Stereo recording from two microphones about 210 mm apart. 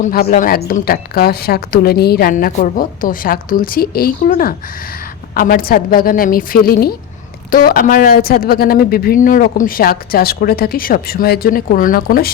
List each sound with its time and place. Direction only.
0.0 s speech: 40° left (ahead or behind)